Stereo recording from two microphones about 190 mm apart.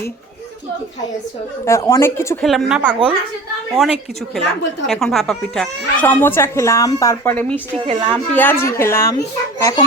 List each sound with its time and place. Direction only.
1.6 s speech: 15° left (ahead or behind)
2.4 s a woman's voice: centre (ahead or behind)
7.9 s speech: 25° right (ahead or behind)
8.4 s a child's voice: 10° left (ahead or behind)